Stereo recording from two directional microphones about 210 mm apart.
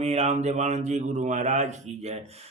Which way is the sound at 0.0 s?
30° right (ahead or behind).